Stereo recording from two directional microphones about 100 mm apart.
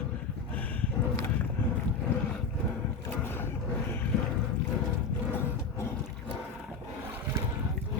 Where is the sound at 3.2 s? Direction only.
20° left (ahead or behind).